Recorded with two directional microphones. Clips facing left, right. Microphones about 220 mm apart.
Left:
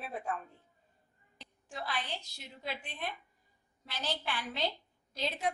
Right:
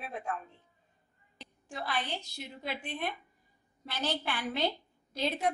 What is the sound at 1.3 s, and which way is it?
A woman's voice, 60° right (ahead or behind).